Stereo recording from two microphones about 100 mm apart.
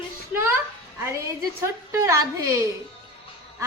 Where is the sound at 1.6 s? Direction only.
30° right (ahead or behind).